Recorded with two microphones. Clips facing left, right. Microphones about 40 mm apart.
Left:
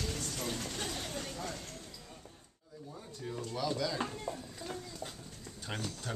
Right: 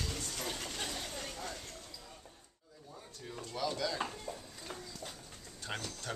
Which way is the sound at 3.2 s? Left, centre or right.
Centre.